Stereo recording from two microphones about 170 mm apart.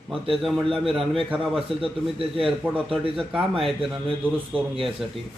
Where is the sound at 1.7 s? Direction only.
35° right (ahead or behind).